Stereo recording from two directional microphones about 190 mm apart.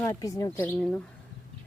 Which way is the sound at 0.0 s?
20° left (ahead or behind).